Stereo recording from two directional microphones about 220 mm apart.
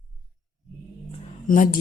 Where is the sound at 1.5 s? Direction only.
35° left (ahead or behind).